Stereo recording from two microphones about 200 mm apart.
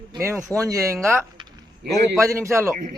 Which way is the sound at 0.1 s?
15° right (ahead or behind).